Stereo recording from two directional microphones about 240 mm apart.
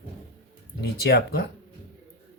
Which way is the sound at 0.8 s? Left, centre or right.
Left.